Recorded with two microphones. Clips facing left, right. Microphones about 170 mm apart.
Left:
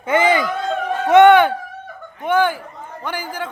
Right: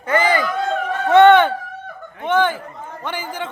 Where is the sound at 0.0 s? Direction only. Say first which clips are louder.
Left 2 dB; 20° left (ahead or behind).